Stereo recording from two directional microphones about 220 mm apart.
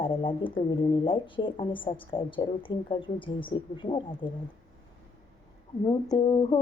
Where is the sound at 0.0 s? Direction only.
20° left (ahead or behind).